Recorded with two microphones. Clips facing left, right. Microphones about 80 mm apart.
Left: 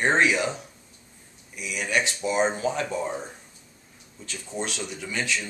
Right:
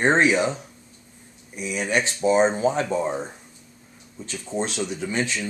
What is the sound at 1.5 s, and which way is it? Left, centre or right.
Speech, right.